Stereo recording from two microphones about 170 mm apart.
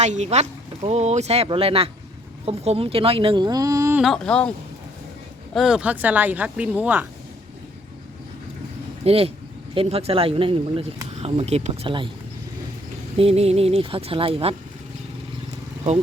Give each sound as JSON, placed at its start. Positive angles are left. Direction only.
{"t": 0.0, "sound": "speech", "side_deg": -40}
{"t": 4.0, "sound": "speech", "side_deg": 5}
{"t": 5.5, "sound": "speech", "side_deg": -5}
{"t": 9.0, "sound": "speech", "side_deg": -35}
{"t": 13.1, "sound": "speech", "side_deg": -35}